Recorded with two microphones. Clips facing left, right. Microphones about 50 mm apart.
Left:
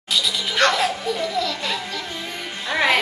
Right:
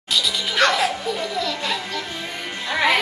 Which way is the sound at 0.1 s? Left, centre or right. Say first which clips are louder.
Even; centre.